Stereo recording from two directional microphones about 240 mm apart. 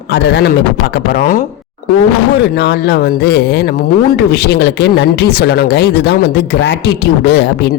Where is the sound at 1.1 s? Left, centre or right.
Left.